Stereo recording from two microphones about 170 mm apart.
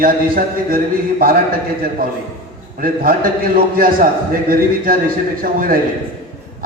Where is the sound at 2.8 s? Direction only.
55° right (ahead or behind).